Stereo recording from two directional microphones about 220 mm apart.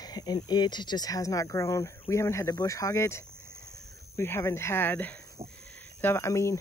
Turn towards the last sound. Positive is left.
turn(degrees=15)  # may be behind; listen again after turning